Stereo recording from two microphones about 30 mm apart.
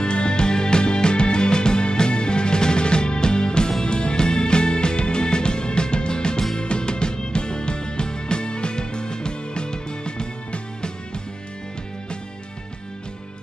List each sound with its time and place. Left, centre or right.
0.0 s music: left